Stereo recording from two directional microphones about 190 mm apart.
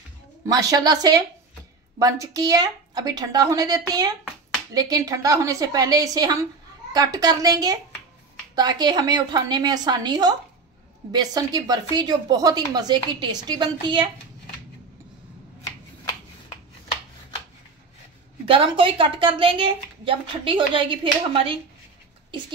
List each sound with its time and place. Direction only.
0.5 s a woman's voice: 20° right (ahead or behind)
18.4 s a woman's voice: 30° right (ahead or behind)